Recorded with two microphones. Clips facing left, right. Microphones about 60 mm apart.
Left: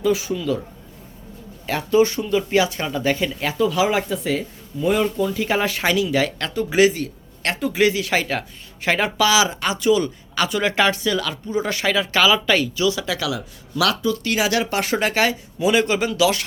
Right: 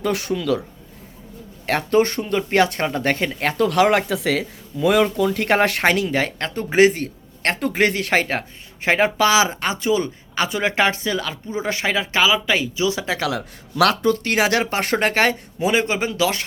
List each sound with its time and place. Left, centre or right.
0.0 s speech: right
1.6 s speech: right; by 12.8 s centre
12.8 s speech: right